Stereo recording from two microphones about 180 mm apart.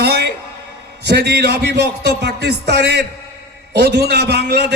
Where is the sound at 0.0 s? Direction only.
65° right (ahead or behind).